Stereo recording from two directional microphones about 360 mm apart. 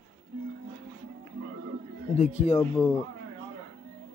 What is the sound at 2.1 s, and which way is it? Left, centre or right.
Speech, centre.